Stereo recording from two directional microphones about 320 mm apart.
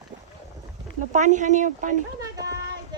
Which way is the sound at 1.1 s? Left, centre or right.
Right.